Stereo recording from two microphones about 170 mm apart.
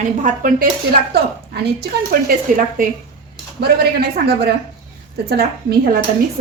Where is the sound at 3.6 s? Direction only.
65° right (ahead or behind).